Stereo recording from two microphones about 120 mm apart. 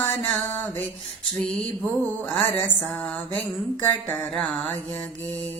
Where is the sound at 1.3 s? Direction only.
5° left (ahead or behind).